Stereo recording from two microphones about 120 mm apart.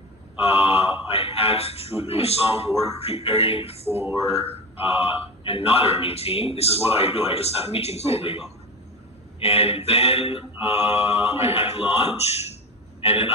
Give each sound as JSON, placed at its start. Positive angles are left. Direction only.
{"t": 0.5, "sound": "a man's voice", "side_deg": 50}
{"t": 3.9, "sound": "mantra", "side_deg": -20}
{"t": 4.5, "sound": "a man's voice", "side_deg": 50}
{"t": 10.6, "sound": "mantra", "side_deg": -20}
{"t": 11.4, "sound": "a man's voice", "side_deg": 55}
{"t": 11.8, "sound": "mantra", "side_deg": -20}
{"t": 12.2, "sound": "a man's voice", "side_deg": 60}